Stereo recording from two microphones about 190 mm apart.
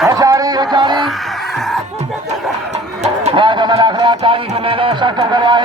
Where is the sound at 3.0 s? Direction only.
30° right (ahead or behind).